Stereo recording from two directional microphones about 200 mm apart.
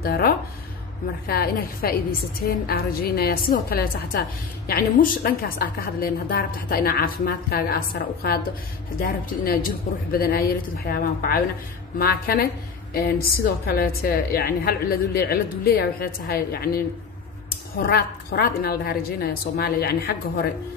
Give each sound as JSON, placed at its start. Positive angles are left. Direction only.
{"t": 1.2, "sound": "a woman's voice", "side_deg": 50}
{"t": 9.0, "sound": "a woman's voice", "side_deg": 45}